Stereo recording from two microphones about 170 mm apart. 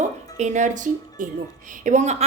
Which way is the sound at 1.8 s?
45° right (ahead or behind).